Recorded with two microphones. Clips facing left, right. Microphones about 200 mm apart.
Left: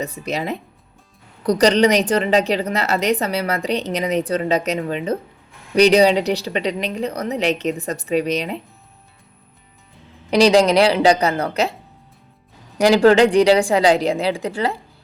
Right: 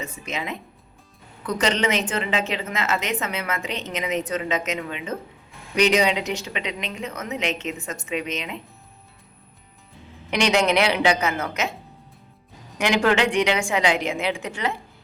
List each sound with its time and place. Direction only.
0.0 s a woman's voice: 35° left (ahead or behind)
10.2 s a woman's voice: 35° left (ahead or behind)
12.8 s a woman's voice: 35° left (ahead or behind)